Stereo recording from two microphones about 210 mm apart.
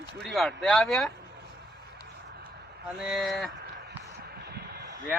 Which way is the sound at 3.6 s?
55° right (ahead or behind).